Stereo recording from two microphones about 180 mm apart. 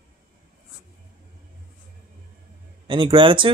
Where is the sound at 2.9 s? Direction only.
25° right (ahead or behind).